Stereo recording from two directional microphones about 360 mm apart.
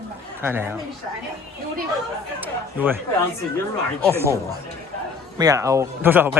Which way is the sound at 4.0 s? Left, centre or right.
Centre.